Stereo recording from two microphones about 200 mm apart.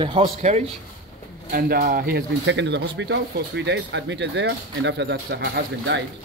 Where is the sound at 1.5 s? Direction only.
50° right (ahead or behind).